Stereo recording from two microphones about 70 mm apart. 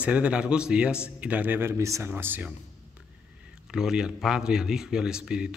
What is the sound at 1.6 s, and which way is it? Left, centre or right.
Speech, right.